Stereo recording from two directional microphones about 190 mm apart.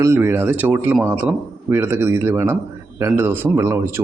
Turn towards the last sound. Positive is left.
turn(degrees=-15)  # may be behind; listen again after turning